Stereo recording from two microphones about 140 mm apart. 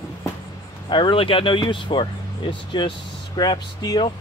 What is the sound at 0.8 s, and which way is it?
Speech, 35° left (ahead or behind).